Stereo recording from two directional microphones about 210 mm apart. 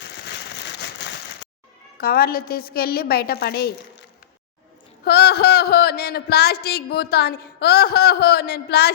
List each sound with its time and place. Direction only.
2.0 s speech: 45° left (ahead or behind)
5.0 s speech: 50° left (ahead or behind)